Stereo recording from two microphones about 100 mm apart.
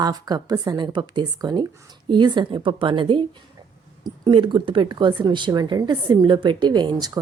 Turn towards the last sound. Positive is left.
turn(degrees=-45)  # may be behind; listen again after turning